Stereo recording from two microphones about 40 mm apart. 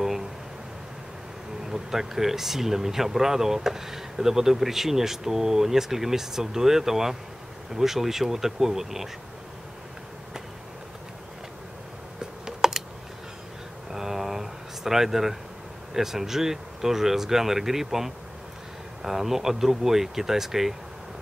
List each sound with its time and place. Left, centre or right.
1.6 s speech: centre
12.2 s computer keyboard: centre
13.9 s a sound: centre
15.9 s speech: centre